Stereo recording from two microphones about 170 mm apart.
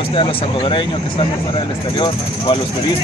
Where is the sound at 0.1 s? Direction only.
30° left (ahead or behind).